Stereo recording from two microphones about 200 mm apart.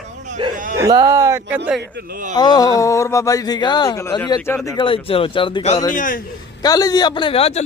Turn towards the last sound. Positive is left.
turn(degrees=30)  # may be behind; listen again after turning